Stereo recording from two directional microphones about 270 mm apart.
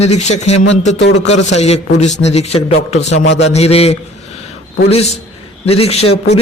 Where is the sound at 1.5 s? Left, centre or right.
Left.